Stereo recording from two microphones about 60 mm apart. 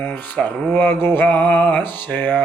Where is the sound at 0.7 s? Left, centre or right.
Left.